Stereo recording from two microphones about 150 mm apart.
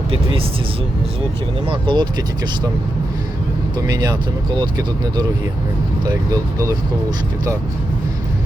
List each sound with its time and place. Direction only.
0.1 s speech: 40° right (ahead or behind)
1.6 s speech: 35° right (ahead or behind)
3.8 s speech: 25° right (ahead or behind)
6.1 s speech: 20° right (ahead or behind)